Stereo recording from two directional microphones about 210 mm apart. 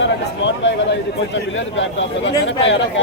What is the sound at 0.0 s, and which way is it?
A man's voice, 60° left (ahead or behind).